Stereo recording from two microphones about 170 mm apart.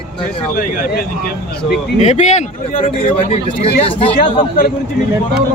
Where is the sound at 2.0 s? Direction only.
40° left (ahead or behind).